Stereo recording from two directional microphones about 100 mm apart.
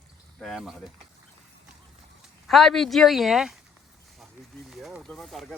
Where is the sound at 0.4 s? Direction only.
5° right (ahead or behind).